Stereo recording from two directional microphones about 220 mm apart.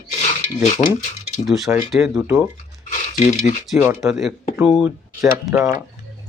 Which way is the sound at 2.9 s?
30° left (ahead or behind).